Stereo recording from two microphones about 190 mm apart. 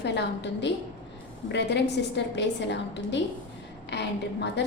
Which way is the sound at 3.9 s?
65° left (ahead or behind).